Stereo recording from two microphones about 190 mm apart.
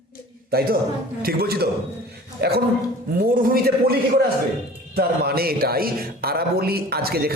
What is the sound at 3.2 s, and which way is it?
A man's voice, 50° right (ahead or behind).